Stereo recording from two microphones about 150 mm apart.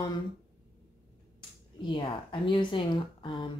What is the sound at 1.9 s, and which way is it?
Speech, 35° left (ahead or behind).